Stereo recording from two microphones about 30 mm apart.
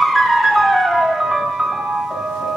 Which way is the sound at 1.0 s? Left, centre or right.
Centre.